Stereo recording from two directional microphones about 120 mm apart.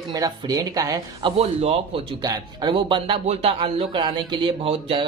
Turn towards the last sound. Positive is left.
turn(degrees=-50)  # may be behind; listen again after turning